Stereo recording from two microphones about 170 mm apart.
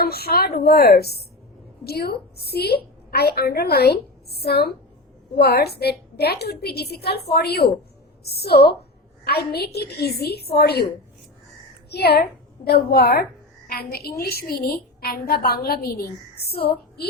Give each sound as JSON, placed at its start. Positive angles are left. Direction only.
{"t": 0.0, "sound": "a woman's voice", "side_deg": 65}
{"t": 11.9, "sound": "a woman's voice", "side_deg": 75}